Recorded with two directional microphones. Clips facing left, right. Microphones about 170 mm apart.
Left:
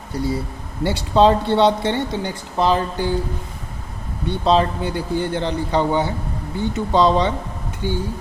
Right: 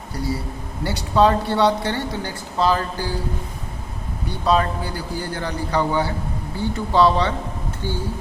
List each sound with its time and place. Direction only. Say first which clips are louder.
0.9 s speech: left 2 dB; 25° left (ahead or behind)
4.3 s speech: left 3 dB; 25° left (ahead or behind)